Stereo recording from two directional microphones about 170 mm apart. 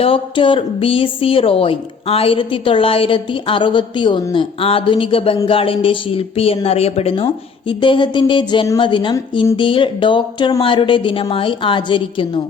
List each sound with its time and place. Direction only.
0.0 s a woman's voice: 30° left (ahead or behind)